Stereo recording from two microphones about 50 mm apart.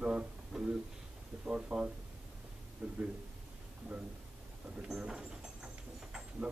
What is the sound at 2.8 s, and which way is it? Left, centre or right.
Speech, centre.